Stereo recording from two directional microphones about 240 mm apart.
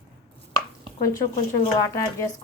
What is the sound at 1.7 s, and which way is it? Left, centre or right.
Speech, centre.